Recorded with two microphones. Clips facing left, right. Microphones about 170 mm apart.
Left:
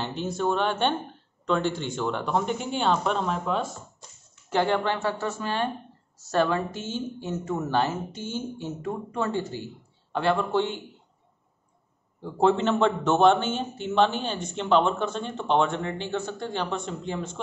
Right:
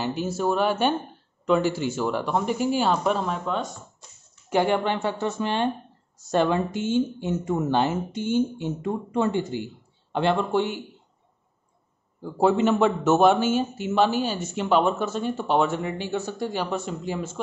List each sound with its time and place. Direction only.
0.0 s a man's voice: 5° right (ahead or behind)
4.5 s a man's voice: 15° right (ahead or behind)
12.2 s a man's voice: 5° right (ahead or behind)